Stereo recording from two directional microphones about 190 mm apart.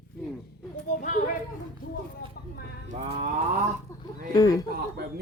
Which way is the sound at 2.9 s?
45° right (ahead or behind).